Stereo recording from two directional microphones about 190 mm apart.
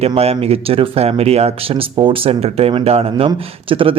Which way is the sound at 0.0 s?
30° right (ahead or behind).